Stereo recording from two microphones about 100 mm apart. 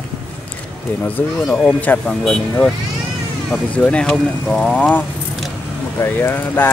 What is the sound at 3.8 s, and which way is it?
Speech, 10° left (ahead or behind).